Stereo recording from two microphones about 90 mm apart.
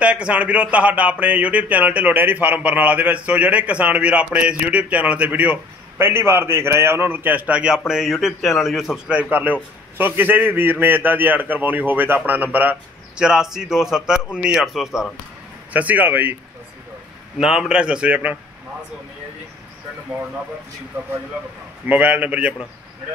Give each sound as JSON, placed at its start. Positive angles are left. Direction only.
{"t": 0.0, "sound": "a man's voice", "side_deg": -15}
{"t": 13.2, "sound": "speech", "side_deg": -5}
{"t": 15.7, "sound": "a man's voice", "side_deg": -15}
{"t": 17.4, "sound": "speech", "side_deg": -10}
{"t": 21.4, "sound": "speech", "side_deg": -15}